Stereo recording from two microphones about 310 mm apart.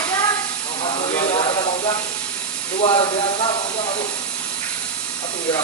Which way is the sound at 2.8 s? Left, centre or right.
Centre.